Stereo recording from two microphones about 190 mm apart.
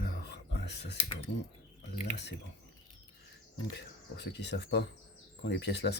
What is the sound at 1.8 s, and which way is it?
Speech, 65° left (ahead or behind).